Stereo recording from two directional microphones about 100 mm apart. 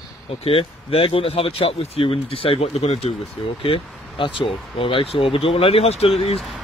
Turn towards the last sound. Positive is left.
turn(degrees=80)